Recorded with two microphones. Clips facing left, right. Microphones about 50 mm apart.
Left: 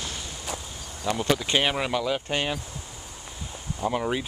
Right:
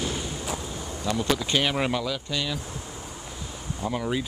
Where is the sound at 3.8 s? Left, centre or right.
Centre.